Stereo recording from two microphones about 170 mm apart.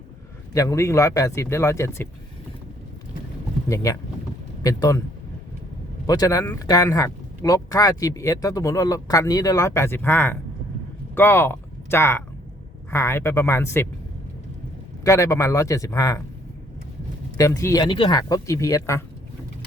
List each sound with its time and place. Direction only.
0.5 s speech: 20° left (ahead or behind)
4.6 s speech: 20° left (ahead or behind)
6.1 s speech: 20° left (ahead or behind)
15.0 s speech: 20° left (ahead or behind)
17.3 s speech: 20° left (ahead or behind)